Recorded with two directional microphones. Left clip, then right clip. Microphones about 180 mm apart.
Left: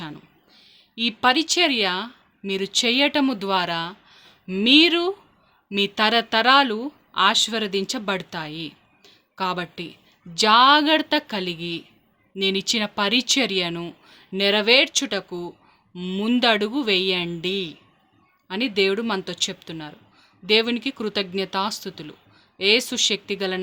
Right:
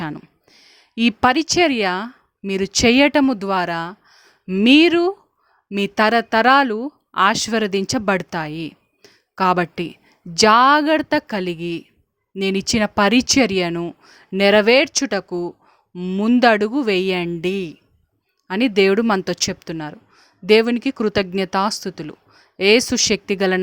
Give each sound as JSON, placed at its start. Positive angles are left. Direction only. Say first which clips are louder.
{"t": 0.0, "sound": "a sound", "louder": "right 8 dB", "side_deg": -55}
{"t": 2.5, "sound": "speech", "louder": "right 5 dB", "side_deg": -50}
{"t": 16.0, "sound": "speech", "louder": "right 5 dB", "side_deg": -35}